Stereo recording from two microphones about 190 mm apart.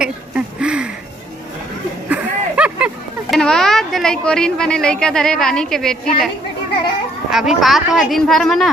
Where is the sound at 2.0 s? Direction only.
5° right (ahead or behind).